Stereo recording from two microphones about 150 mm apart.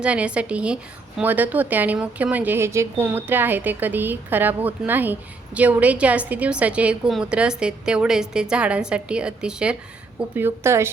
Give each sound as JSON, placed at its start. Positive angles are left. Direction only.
{"t": 0.0, "sound": "a woman's voice", "side_deg": -5}